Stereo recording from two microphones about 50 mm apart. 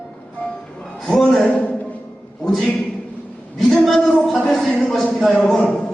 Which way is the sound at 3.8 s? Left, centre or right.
Centre.